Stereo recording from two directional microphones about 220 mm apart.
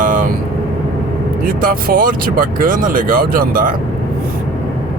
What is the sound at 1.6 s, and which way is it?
Speech, 40° right (ahead or behind).